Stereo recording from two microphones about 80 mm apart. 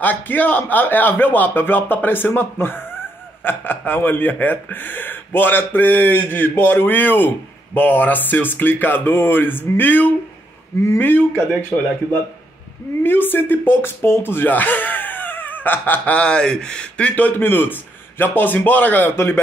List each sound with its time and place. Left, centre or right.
0.0 s a man's voice: left